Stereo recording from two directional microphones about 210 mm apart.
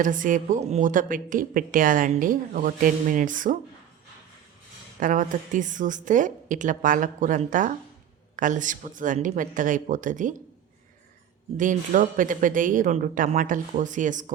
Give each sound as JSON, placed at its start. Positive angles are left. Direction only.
{"t": 0.0, "sound": "a woman's voice", "side_deg": -40}
{"t": 4.9, "sound": "a woman's voice", "side_deg": -40}
{"t": 11.5, "sound": "a woman's voice", "side_deg": -40}